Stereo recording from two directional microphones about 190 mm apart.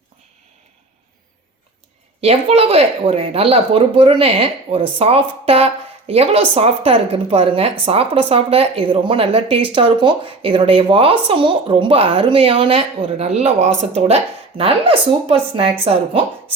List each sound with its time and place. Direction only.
2.2 s a woman's voice: 30° right (ahead or behind)